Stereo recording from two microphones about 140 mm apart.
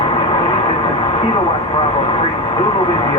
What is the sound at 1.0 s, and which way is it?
Vehicle, 40° left (ahead or behind).